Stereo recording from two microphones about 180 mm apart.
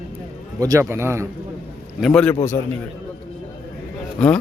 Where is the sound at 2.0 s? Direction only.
5° left (ahead or behind).